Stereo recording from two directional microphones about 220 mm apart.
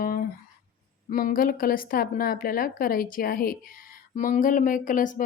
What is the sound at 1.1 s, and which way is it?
A woman's voice, 40° left (ahead or behind).